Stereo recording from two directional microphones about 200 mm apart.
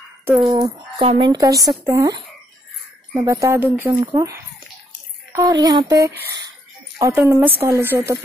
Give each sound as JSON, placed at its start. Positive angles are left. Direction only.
{"t": 0.2, "sound": "a woman's voice", "side_deg": -15}